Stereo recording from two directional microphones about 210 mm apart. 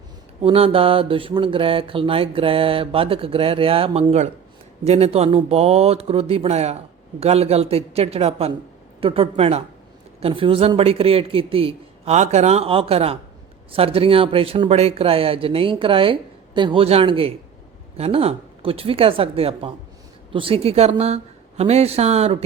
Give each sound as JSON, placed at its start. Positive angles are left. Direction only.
{"t": 0.4, "sound": "mantra", "side_deg": -25}